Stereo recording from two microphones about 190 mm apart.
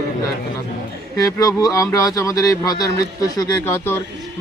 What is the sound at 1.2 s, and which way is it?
Speech, 20° left (ahead or behind).